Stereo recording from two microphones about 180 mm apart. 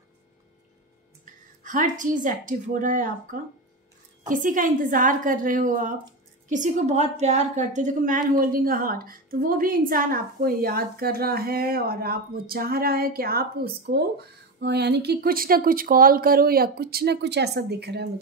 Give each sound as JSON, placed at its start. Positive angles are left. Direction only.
{"t": 1.2, "sound": "music", "side_deg": -45}
{"t": 2.2, "sound": "a woman's voice", "side_deg": -45}